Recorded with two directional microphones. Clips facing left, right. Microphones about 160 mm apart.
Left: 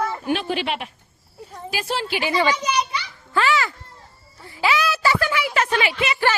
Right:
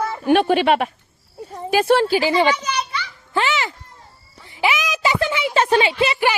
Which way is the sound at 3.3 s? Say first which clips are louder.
Left 1 dB; 20° right (ahead or behind).